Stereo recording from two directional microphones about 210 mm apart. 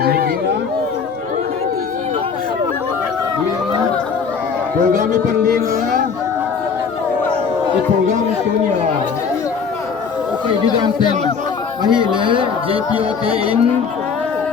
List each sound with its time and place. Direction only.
0.0 s a sound: 45° right (ahead or behind)
4.9 s music: 40° right (ahead or behind)
11.8 s speech: 20° right (ahead or behind)